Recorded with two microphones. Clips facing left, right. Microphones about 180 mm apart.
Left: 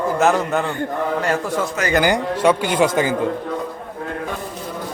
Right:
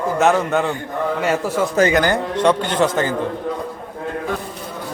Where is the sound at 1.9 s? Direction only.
10° left (ahead or behind).